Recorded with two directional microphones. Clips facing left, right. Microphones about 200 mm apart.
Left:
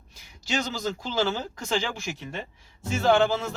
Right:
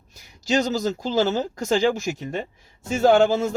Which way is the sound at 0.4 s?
40° right (ahead or behind).